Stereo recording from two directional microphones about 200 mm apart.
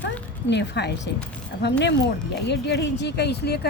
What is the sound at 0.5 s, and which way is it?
A woman's voice, 60° left (ahead or behind).